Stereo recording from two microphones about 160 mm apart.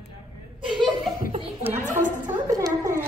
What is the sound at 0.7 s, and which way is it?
Laughter, 30° right (ahead or behind).